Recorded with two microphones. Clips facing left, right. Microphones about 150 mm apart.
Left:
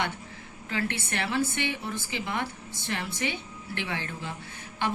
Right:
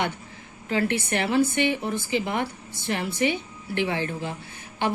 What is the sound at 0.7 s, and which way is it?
A woman's voice, 15° right (ahead or behind).